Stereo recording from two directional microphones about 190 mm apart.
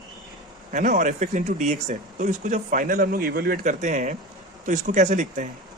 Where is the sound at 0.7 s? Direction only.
40° right (ahead or behind).